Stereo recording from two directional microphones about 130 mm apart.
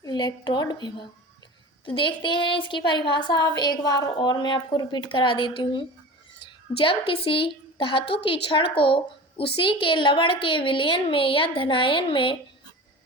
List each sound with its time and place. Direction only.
0.0 s a woman's voice: 35° left (ahead or behind)